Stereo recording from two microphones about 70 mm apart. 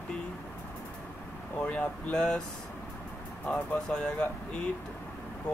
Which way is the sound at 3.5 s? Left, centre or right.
Centre.